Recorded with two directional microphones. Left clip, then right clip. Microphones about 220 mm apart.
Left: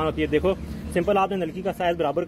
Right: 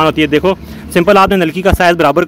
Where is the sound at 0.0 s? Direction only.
30° right (ahead or behind).